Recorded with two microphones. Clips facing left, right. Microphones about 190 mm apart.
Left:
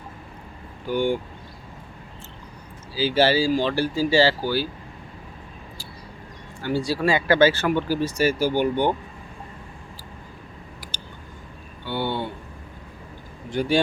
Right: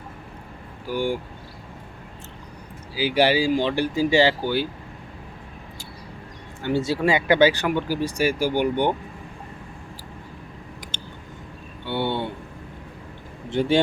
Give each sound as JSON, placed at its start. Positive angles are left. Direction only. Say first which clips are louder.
{"t": 0.9, "sound": "speech", "louder": "left 2 dB", "side_deg": -10}
{"t": 2.9, "sound": "speech", "louder": "even", "side_deg": -15}
{"t": 6.6, "sound": "speech", "louder": "right 1 dB", "side_deg": -20}
{"t": 10.9, "sound": "a sound", "louder": "right 2 dB", "side_deg": -25}
{"t": 11.9, "sound": "speech", "louder": "right 1 dB", "side_deg": -25}
{"t": 13.5, "sound": "speech", "louder": "right 2 dB", "side_deg": -20}